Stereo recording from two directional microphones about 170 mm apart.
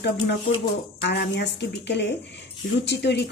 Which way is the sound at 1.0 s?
75° left (ahead or behind).